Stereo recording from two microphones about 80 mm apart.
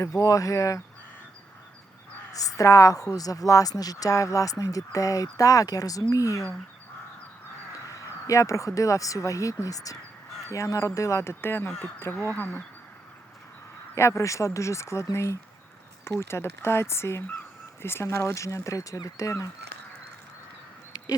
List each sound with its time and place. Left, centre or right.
0.0 s a woman's voice: left
2.3 s a woman's voice: left
7.9 s speech: left
13.9 s speech: left